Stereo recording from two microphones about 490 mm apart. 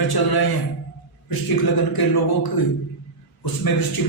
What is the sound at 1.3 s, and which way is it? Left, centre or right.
A man's voice, left.